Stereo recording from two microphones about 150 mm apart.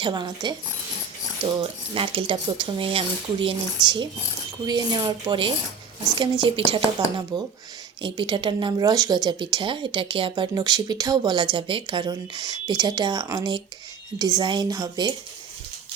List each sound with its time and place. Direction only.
0.0 s speech: 30° right (ahead or behind)
1.6 s a woman's voice: 35° right (ahead or behind)